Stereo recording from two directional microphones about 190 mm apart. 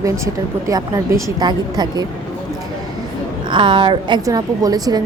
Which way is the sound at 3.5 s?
25° right (ahead or behind).